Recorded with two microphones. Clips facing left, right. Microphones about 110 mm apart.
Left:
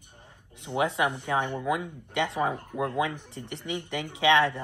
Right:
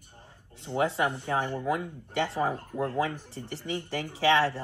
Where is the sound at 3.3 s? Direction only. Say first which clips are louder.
Even; 65° left (ahead or behind).